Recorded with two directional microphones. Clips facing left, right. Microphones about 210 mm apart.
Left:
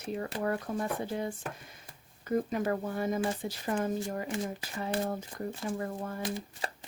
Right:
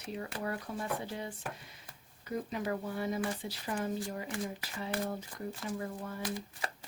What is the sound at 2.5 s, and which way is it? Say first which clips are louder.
Speech: left 4 dB; 50° left (ahead or behind).